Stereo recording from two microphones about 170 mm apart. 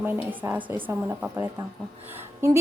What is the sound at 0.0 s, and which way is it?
A woman's voice, 10° right (ahead or behind).